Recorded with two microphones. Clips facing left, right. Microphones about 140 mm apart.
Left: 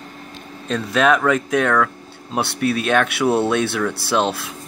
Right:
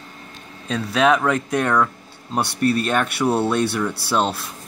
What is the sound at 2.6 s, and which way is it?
Speech, 90° left.